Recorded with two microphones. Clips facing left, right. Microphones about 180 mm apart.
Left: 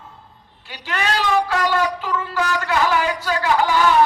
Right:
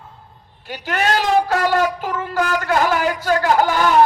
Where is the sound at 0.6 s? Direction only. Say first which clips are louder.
Right 4 dB; 50° right (ahead or behind).